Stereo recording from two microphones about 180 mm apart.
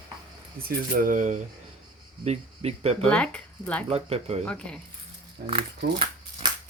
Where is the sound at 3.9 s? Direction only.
35° right (ahead or behind).